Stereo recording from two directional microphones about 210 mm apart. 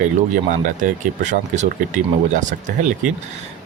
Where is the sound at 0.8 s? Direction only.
35° right (ahead or behind).